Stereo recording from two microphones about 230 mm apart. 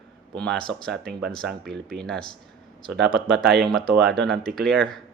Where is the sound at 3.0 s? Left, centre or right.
Right.